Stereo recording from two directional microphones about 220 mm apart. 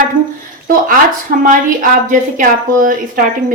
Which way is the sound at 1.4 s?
35° right (ahead or behind).